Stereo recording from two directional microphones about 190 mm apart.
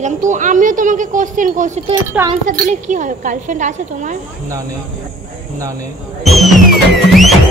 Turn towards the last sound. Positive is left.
turn(degrees=0)  # may be behind; listen again after turning